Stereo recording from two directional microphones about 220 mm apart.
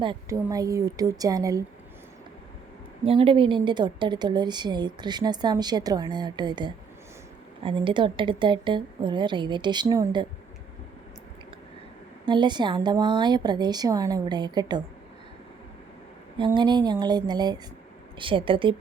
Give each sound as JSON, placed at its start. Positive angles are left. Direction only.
{"t": 0.0, "sound": "a woman's voice", "side_deg": -20}
{"t": 3.0, "sound": "a woman's voice", "side_deg": -25}
{"t": 12.2, "sound": "a woman's voice", "side_deg": -20}
{"t": 16.4, "sound": "a woman's voice", "side_deg": -20}